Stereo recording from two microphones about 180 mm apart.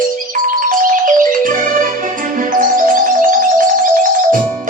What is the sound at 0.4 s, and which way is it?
Music, 50° right (ahead or behind).